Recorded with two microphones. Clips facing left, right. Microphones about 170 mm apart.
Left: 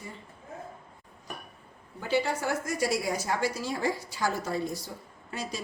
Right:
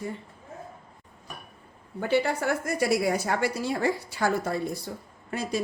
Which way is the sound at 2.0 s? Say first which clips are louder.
Right 3 dB; 60° right (ahead or behind).